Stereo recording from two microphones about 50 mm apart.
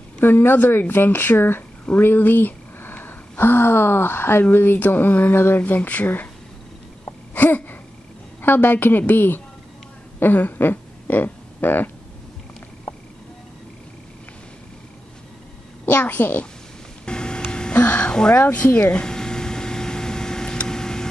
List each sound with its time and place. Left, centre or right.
0.2 s a woman's voice: left
7.3 s a sound: left
8.4 s a woman's voice: left
15.8 s a woman's voice: left
17.0 s music: centre
18.0 s a sound: centre
18.3 s speech: left
18.9 s a sound: centre
20.6 s vehicle: centre